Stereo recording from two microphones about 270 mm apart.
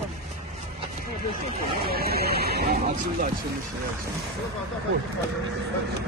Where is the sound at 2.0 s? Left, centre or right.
Right.